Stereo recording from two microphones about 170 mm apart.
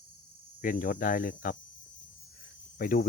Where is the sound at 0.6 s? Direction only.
55° left (ahead or behind).